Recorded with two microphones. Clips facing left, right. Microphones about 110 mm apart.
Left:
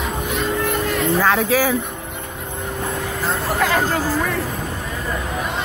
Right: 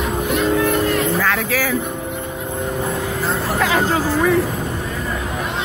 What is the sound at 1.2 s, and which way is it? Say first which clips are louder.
Speech: left 3 dB; 20° left (ahead or behind).